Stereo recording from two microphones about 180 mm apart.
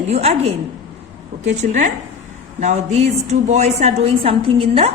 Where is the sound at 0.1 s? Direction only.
35° right (ahead or behind).